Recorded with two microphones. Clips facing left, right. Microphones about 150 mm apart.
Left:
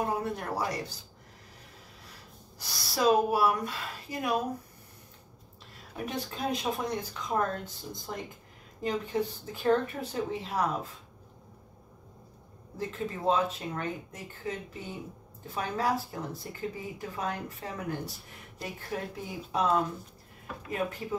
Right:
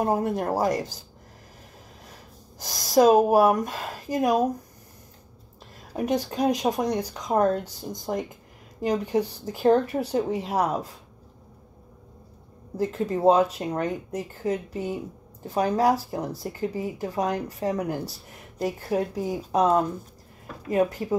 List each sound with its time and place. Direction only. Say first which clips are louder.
0.4 s a woman's voice: right 9 dB; 45° right (ahead or behind)
2.6 s a woman's voice: right 9 dB; 45° right (ahead or behind)
5.9 s speech: right 10 dB; 40° right (ahead or behind)
12.7 s speech: right 9 dB; 40° right (ahead or behind)